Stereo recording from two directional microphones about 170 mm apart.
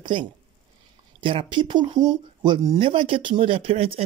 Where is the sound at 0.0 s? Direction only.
25° right (ahead or behind).